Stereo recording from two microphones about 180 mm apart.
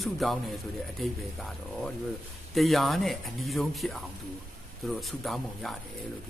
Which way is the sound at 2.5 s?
Centre (ahead or behind).